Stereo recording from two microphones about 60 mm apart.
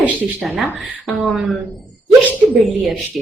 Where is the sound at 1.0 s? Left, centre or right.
Centre.